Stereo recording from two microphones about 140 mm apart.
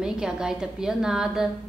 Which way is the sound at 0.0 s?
5° right (ahead or behind).